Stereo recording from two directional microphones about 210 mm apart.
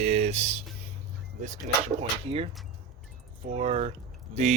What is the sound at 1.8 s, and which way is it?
Speech, 30° right (ahead or behind).